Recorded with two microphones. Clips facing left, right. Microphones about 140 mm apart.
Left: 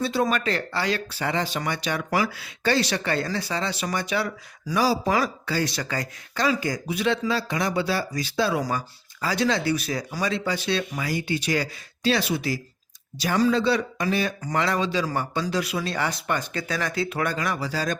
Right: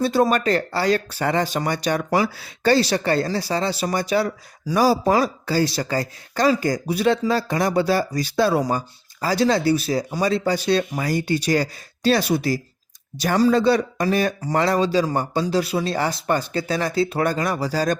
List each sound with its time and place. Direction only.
0.0 s speech: 40° right (ahead or behind)
2.0 s speech: 30° right (ahead or behind)